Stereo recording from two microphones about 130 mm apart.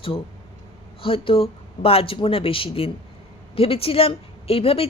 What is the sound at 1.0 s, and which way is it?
Speech, 45° left (ahead or behind).